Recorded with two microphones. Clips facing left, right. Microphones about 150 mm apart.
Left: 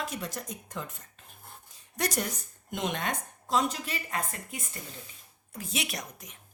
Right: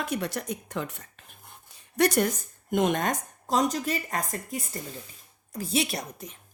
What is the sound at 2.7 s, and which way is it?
A woman's voice, 50° right (ahead or behind).